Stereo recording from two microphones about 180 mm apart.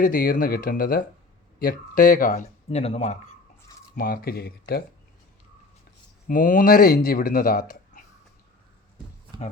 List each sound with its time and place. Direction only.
0.0 s speech: 50° left (ahead or behind)
2.6 s speech: 35° left (ahead or behind)
3.9 s speech: 55° left (ahead or behind)
6.2 s speech: 50° left (ahead or behind)